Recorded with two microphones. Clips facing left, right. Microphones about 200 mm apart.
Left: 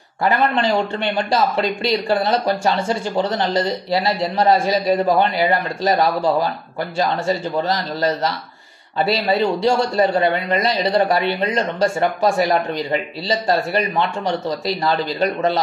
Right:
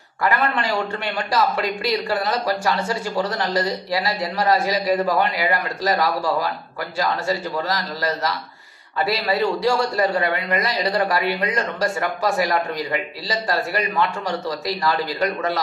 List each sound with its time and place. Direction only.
0.2 s a man's voice: 25° left (ahead or behind)